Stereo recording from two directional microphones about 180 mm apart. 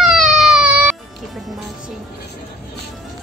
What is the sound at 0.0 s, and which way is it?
Baby cry, centre (ahead or behind).